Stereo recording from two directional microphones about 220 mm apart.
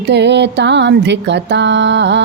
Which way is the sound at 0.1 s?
50° right (ahead or behind).